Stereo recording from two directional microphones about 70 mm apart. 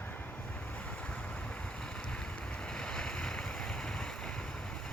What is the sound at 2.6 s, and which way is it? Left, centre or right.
Waves, centre.